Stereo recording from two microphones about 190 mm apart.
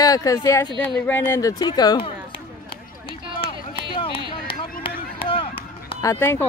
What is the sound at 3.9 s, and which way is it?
Run, 30° left (ahead or behind).